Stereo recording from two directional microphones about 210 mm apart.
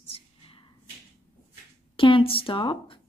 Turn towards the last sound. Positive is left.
turn(degrees=25)  # may be behind; listen again after turning